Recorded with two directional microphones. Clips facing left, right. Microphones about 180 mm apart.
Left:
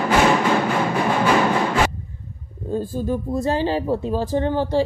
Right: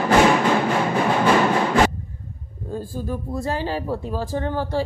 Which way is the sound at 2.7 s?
25° left (ahead or behind).